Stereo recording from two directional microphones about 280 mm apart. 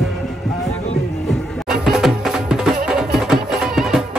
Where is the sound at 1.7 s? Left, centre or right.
Centre.